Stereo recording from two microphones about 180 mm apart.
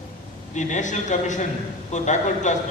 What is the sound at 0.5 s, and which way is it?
A man's voice, 40° left (ahead or behind).